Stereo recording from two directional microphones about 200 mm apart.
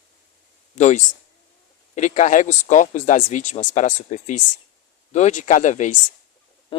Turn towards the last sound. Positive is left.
turn(degrees=35)  # may be behind; listen again after turning